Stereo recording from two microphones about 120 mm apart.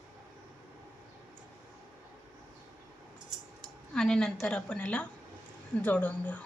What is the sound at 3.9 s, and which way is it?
A woman's voice, 5° left (ahead or behind).